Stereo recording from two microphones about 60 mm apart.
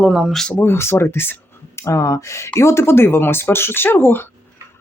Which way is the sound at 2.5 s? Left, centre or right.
Left.